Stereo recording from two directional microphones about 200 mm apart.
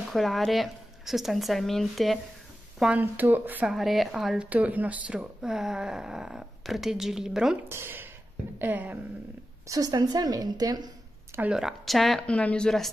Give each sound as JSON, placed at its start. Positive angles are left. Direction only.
{"t": 0.1, "sound": "a woman's voice", "side_deg": 0}
{"t": 11.3, "sound": "speech", "side_deg": -5}